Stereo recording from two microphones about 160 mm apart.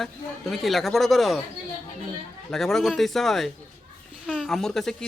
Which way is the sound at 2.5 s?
Centre (ahead or behind).